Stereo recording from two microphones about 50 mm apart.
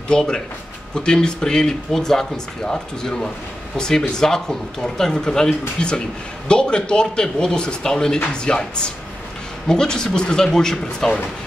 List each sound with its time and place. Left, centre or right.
0.1 s speech: centre